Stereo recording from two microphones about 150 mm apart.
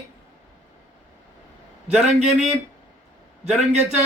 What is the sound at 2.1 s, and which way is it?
Speech, 45° right (ahead or behind).